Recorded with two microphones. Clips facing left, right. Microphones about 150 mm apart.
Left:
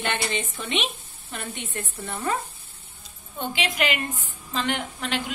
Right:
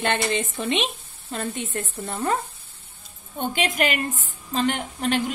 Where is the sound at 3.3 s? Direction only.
45° right (ahead or behind).